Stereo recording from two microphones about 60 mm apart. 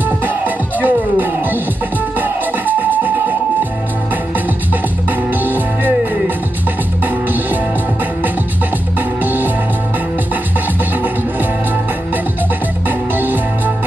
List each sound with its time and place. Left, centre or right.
0.7 s music: right
5.4 s music: right
9.2 s music: right
13.1 s music: right